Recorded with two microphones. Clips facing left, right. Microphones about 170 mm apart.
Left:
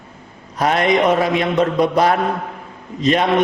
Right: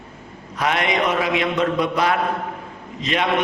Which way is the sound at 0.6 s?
40° left (ahead or behind).